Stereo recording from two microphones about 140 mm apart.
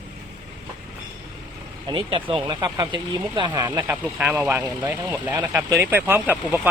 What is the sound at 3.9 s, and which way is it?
Speech, 10° right (ahead or behind).